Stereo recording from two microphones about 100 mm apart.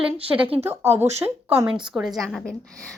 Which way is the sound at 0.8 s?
90° right.